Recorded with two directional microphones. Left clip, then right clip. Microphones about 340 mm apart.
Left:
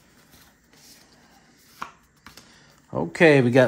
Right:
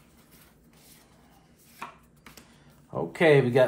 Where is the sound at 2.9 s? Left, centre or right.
Left.